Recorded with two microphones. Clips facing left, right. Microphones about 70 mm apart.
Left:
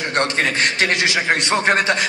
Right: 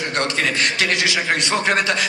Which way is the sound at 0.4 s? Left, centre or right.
Left.